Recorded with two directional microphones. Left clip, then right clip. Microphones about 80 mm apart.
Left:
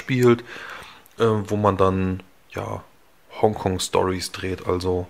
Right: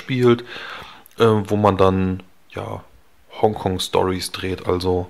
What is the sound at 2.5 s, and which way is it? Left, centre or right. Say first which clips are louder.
Speech: even; centre.